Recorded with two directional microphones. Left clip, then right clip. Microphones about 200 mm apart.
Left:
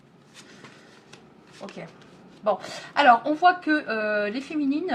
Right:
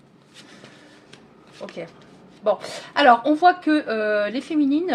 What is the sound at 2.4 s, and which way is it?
Speech, 35° right (ahead or behind).